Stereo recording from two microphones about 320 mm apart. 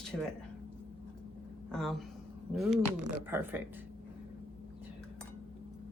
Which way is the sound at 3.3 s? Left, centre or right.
Centre.